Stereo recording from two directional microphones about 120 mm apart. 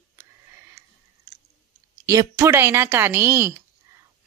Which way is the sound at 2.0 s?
30° right (ahead or behind).